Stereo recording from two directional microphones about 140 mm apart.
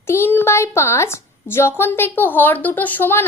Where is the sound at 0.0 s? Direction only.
15° left (ahead or behind).